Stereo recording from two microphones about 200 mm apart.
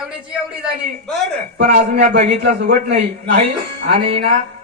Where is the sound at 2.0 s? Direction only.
40° right (ahead or behind).